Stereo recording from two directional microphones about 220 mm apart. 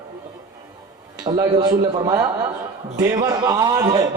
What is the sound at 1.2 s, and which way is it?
A man's voice, 20° right (ahead or behind).